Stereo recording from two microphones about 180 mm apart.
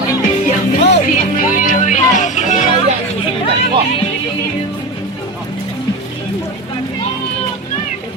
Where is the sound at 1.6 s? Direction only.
45° left (ahead or behind).